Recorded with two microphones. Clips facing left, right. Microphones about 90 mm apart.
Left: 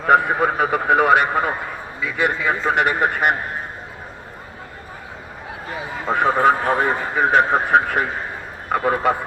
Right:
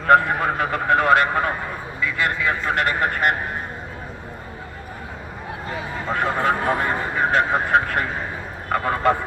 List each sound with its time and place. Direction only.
0.1 s speech: 10° left (ahead or behind)
6.1 s speech: 15° left (ahead or behind)